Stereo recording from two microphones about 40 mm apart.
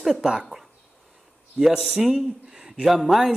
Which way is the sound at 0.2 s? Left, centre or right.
Centre.